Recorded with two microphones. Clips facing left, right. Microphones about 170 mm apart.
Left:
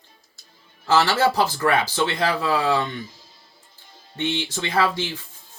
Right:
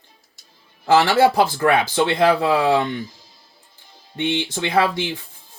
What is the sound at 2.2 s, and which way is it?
Speech, 60° right (ahead or behind).